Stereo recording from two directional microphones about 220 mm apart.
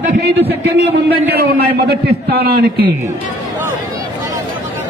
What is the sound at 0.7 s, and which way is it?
A man's voice, 50° right (ahead or behind).